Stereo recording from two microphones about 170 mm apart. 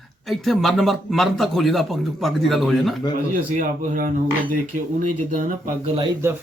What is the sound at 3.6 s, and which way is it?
Speech, 50° right (ahead or behind).